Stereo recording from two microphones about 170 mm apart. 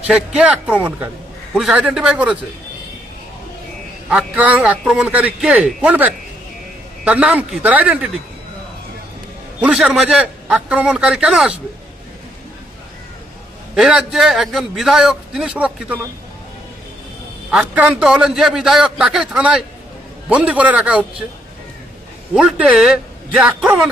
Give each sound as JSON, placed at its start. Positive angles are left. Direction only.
{"t": 0.1, "sound": "a man's voice", "side_deg": -5}
{"t": 4.1, "sound": "a man's voice", "side_deg": -5}
{"t": 9.6, "sound": "a man's voice", "side_deg": -5}
{"t": 13.7, "sound": "a man's voice", "side_deg": 0}
{"t": 17.5, "sound": "a man's voice", "side_deg": -5}
{"t": 22.4, "sound": "a man's voice", "side_deg": -5}